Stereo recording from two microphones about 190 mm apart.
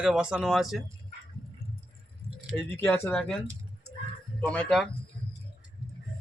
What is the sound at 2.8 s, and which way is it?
Speech, 10° left (ahead or behind).